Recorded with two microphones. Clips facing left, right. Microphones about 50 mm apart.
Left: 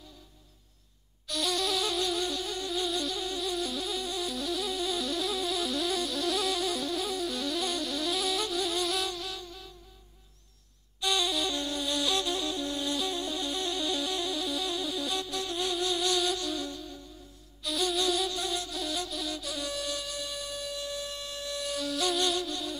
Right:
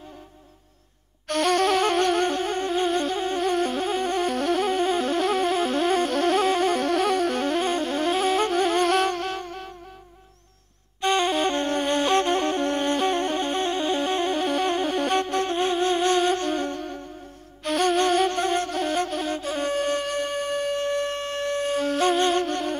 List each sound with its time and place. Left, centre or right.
1.2 s flute: right
11.0 s flute: right